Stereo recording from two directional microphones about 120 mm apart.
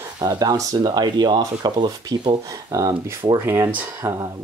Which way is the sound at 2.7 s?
30° right (ahead or behind).